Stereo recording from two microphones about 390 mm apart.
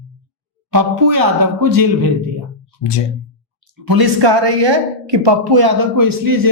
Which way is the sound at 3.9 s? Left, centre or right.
Right.